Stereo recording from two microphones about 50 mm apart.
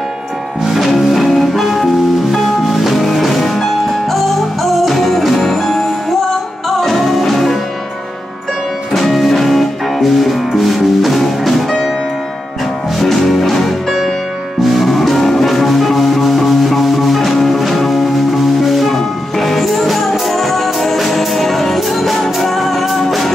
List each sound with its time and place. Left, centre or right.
0.7 s music: centre
8.9 s music: centre
13.0 s music: centre